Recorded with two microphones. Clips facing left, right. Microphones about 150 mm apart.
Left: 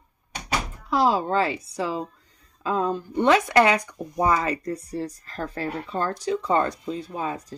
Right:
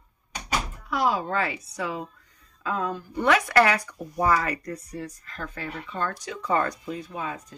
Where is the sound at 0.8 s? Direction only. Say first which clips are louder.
Left 4 dB; 30° left (ahead or behind).